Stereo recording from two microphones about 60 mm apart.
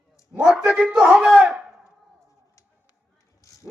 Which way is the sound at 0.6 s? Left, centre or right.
Centre.